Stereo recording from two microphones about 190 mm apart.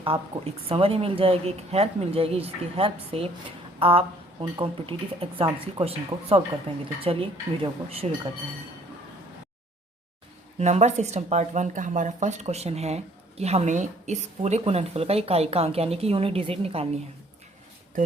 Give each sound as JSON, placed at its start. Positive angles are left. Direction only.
{"t": 0.7, "sound": "speech", "side_deg": -30}
{"t": 3.8, "sound": "a sound", "side_deg": -30}
{"t": 4.5, "sound": "speech", "side_deg": -25}
{"t": 10.6, "sound": "speech", "side_deg": -35}